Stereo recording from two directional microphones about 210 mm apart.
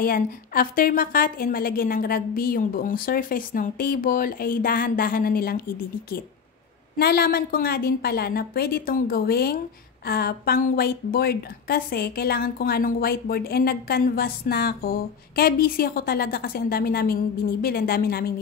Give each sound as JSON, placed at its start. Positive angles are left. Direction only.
{"t": 0.0, "sound": "a woman's voice", "side_deg": 45}